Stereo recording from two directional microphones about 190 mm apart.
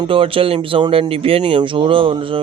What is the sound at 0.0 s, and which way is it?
Speech, 30° right (ahead or behind).